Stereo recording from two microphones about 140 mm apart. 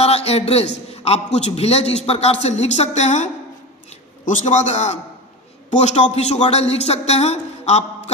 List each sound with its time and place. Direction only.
0.0 s a man's voice: 45° left (ahead or behind)